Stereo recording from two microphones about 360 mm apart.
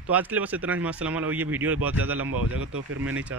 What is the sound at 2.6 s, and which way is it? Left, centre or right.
Speech, right.